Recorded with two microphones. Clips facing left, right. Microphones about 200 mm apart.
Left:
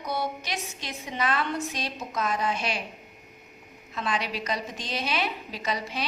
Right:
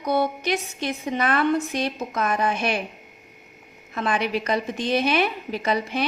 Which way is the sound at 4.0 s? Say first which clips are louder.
Right 6 dB; 55° right (ahead or behind).